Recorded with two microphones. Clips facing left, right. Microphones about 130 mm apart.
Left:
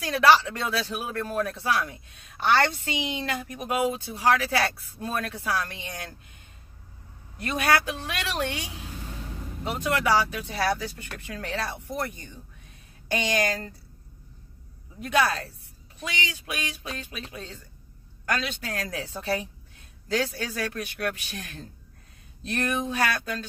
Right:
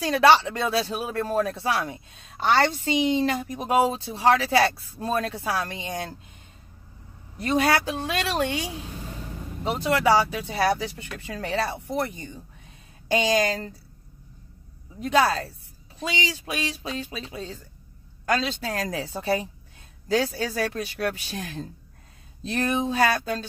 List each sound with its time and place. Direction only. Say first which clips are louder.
0.0 s speech: right 2 dB; 25° right (ahead or behind)
7.5 s speech: right 2 dB; 30° right (ahead or behind)
9.7 s speech: right 4 dB; 30° right (ahead or behind)
15.1 s speech: right 3 dB; 30° right (ahead or behind)